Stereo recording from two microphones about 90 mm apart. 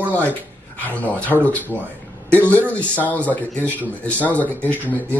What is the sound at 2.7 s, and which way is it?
Speech, 15° left (ahead or behind).